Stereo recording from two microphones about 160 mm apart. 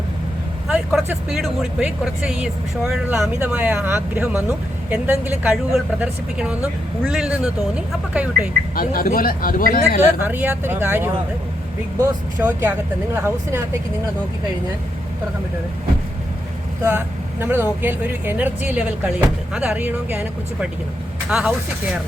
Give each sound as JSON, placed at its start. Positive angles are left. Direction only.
{"t": 0.7, "sound": "speech", "side_deg": -5}
{"t": 8.7, "sound": "speech", "side_deg": 65}
{"t": 10.2, "sound": "speech", "side_deg": -10}
{"t": 17.4, "sound": "speech", "side_deg": -15}